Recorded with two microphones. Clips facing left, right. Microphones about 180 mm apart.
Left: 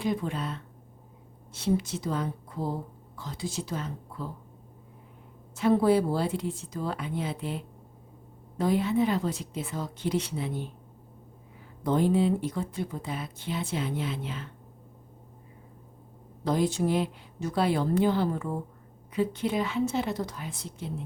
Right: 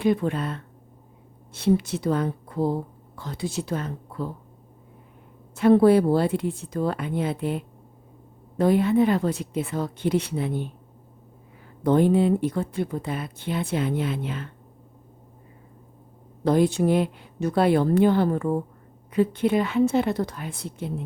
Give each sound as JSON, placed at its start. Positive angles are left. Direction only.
{"t": 0.0, "sound": "speech", "side_deg": -60}
{"t": 5.5, "sound": "speech", "side_deg": -60}
{"t": 11.8, "sound": "speech", "side_deg": -60}
{"t": 16.4, "sound": "speech", "side_deg": -60}